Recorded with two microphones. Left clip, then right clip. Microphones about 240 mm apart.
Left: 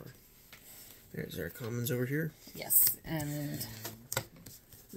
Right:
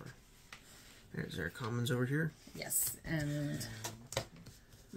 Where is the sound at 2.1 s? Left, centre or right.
Centre.